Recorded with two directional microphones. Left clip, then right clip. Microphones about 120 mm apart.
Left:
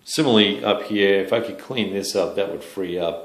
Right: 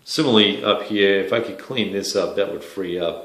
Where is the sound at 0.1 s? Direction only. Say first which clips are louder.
Right 1 dB; 30° left (ahead or behind).